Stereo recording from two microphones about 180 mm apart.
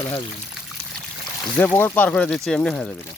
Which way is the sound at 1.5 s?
10° left (ahead or behind).